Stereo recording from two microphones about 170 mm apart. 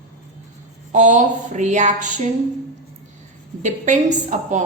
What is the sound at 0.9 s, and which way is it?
A woman's voice, 45° right (ahead or behind).